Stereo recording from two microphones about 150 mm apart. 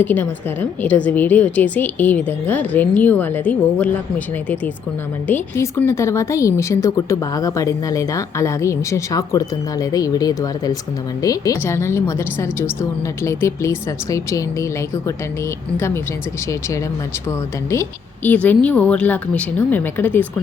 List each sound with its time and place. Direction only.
0.0 s a woman's voice: 10° left (ahead or behind)
5.3 s a woman's voice: 15° left (ahead or behind)
16.5 s a woman's voice: 20° left (ahead or behind)